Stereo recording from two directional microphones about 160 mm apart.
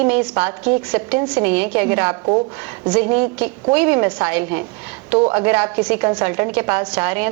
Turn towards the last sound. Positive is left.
turn(degrees=-10)  # may be behind; listen again after turning